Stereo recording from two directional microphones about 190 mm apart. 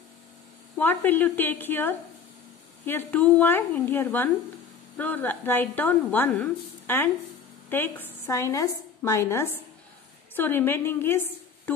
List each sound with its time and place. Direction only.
0.7 s a woman's voice: 10° left (ahead or behind)